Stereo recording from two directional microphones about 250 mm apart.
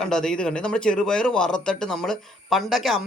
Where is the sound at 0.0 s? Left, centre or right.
Centre.